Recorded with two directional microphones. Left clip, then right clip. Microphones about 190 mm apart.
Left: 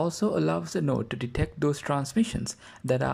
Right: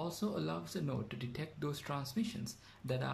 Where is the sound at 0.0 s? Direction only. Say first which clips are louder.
Left 13 dB; 40° left (ahead or behind).